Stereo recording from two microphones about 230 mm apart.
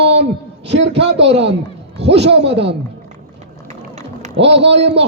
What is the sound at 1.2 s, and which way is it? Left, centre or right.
Speech, right.